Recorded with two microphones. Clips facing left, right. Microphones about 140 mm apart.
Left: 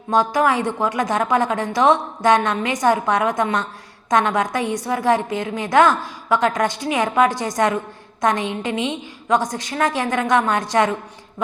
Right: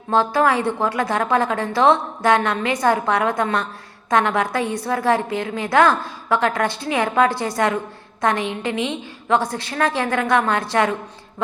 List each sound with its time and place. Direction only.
0.1 s a woman's voice: 15° left (ahead or behind)